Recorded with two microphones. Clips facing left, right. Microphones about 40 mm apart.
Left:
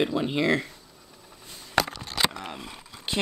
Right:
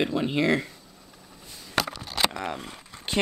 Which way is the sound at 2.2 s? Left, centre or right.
Centre.